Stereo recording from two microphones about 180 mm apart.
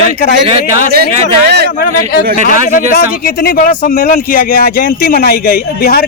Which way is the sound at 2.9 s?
50° left (ahead or behind).